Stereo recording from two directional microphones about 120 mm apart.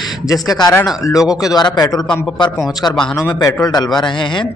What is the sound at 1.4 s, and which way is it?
Speech, 30° left (ahead or behind).